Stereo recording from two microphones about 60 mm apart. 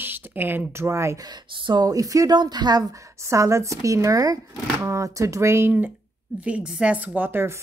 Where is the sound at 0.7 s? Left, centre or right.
Right.